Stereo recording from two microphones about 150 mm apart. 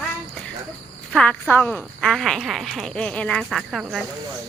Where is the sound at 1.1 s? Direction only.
10° left (ahead or behind).